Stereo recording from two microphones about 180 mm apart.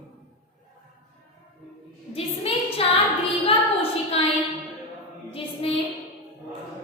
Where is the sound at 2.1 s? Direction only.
30° left (ahead or behind).